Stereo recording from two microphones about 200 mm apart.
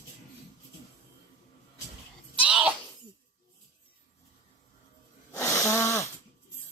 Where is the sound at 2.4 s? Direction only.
5° right (ahead or behind).